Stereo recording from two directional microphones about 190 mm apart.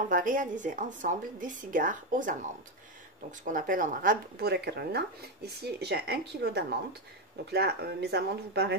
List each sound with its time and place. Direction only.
0.1 s a woman's voice: 45° right (ahead or behind)